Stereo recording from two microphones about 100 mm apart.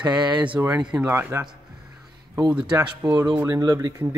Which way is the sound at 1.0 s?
25° right (ahead or behind).